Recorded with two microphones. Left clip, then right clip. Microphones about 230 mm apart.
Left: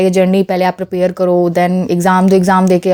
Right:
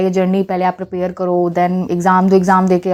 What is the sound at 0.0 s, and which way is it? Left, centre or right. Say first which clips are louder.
Speech: left 4 dB; left.